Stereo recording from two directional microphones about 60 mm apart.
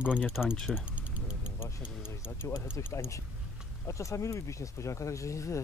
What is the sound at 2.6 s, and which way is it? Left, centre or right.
Speech, left.